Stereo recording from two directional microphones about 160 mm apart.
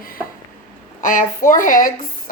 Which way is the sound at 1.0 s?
55° left (ahead or behind).